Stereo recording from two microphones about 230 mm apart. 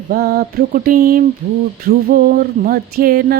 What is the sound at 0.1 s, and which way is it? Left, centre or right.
Speech, right.